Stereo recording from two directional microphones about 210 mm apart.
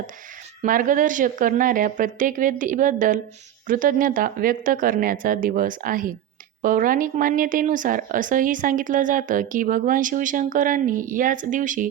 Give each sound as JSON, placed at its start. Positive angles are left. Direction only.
{"t": 0.6, "sound": "speech", "side_deg": -40}